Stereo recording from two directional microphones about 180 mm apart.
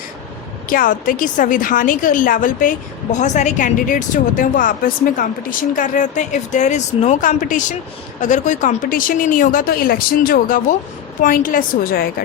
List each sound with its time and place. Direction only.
0.7 s a woman's voice: 50° left (ahead or behind)